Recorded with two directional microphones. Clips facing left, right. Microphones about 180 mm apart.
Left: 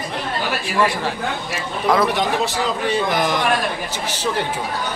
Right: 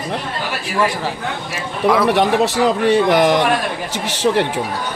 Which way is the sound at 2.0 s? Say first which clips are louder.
Right 5 dB; 75° right (ahead or behind).